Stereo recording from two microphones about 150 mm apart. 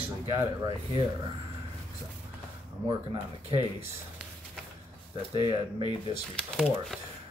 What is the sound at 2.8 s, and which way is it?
Speech, 30° right (ahead or behind).